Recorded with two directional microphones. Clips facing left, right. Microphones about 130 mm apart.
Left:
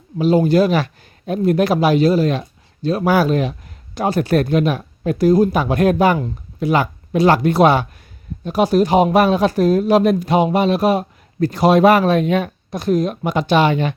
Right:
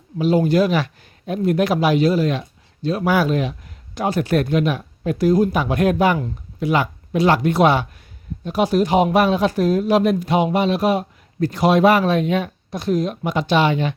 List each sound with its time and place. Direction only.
0.2 s speech: 35° left (ahead or behind); by 13.9 s 50° left (ahead or behind)